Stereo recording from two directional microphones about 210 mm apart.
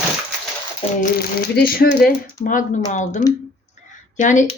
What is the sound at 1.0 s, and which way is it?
Speech, 45° left (ahead or behind).